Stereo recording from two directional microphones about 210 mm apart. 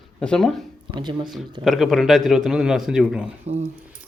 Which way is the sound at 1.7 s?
Centre (ahead or behind).